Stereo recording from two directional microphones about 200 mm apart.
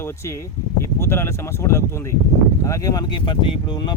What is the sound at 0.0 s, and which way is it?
Speech, 15° left (ahead or behind).